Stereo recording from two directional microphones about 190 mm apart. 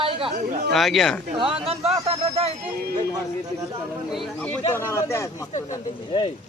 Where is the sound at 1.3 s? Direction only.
30° right (ahead or behind).